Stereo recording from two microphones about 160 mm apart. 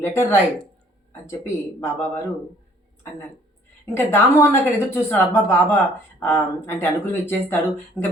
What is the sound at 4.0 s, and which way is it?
Speech, 15° left (ahead or behind).